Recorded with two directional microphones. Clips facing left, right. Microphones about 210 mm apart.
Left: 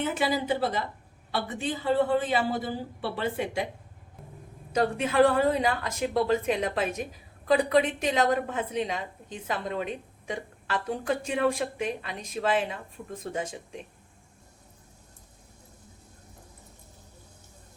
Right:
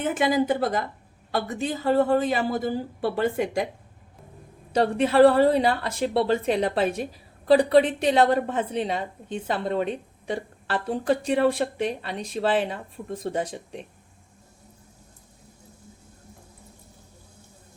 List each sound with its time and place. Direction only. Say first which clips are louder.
0.0 s speech: right 5 dB; 50° right (ahead or behind)
4.7 s a woman's voice: right 5 dB; 35° right (ahead or behind)